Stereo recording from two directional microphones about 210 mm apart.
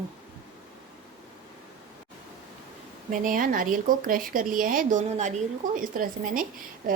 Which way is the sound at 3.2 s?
40° right (ahead or behind).